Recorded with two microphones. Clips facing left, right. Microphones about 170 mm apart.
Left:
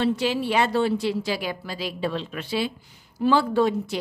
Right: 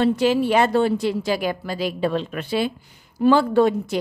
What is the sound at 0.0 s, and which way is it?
A woman's voice, 50° right (ahead or behind).